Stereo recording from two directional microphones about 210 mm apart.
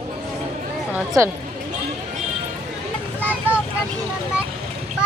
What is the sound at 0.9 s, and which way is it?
Speech, 15° right (ahead or behind).